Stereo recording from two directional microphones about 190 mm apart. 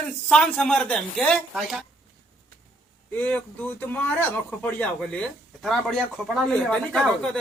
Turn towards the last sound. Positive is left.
turn(degrees=5)  # may be behind; listen again after turning